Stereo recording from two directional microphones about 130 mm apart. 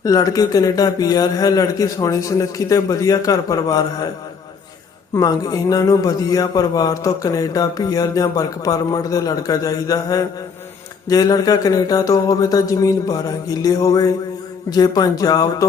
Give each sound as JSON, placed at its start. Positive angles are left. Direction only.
{"t": 0.0, "sound": "a man's voice", "side_deg": 25}
{"t": 5.1, "sound": "a man's voice", "side_deg": 30}